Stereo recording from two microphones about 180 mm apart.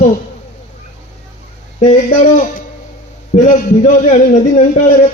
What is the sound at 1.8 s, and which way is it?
A man's voice, 40° left (ahead or behind).